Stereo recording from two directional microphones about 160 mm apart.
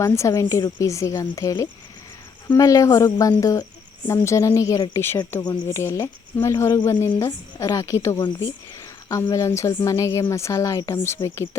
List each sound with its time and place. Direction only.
0.0 s speech: 20° left (ahead or behind)